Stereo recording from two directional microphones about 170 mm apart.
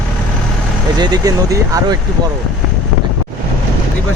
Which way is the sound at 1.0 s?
20° right (ahead or behind).